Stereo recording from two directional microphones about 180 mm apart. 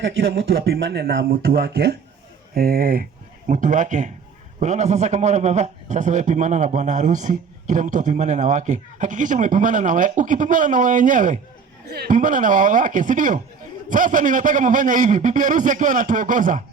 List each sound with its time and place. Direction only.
0.3 s a man's voice: 65° right (ahead or behind); by 11.3 s 45° right (ahead or behind)
11.9 s a man's voice: 55° right (ahead or behind)